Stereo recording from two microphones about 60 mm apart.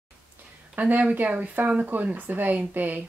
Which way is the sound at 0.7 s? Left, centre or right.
Right.